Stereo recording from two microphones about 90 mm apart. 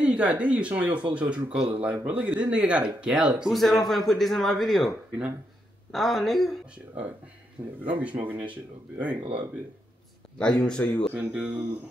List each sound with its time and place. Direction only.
0.0 s a man's voice: 15° right (ahead or behind); by 6.6 s centre (ahead or behind)
7.6 s speech: 20° right (ahead or behind)
10.3 s speech: 10° left (ahead or behind)
11.1 s speech: 20° right (ahead or behind)